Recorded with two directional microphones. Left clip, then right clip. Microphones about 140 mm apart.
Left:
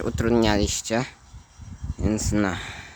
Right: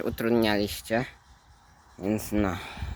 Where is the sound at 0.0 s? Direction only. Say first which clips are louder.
Left 3 dB; 15° left (ahead or behind).